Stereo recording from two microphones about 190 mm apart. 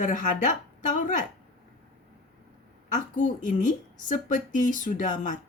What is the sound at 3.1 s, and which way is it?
Speech, 45° left (ahead or behind).